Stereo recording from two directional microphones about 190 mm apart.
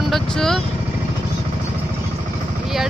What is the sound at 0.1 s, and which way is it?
Vehicle, centre (ahead or behind).